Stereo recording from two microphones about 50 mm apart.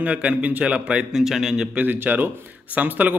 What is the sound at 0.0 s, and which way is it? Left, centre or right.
A man's voice, right.